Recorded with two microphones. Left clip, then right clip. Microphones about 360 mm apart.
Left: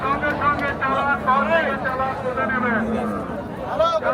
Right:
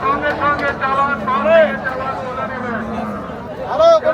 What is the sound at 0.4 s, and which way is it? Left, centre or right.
Vehicle, centre.